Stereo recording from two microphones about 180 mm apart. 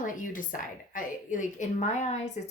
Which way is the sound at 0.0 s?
45° left (ahead or behind).